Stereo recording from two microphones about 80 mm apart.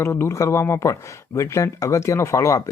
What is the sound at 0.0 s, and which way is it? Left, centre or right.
Speech, left.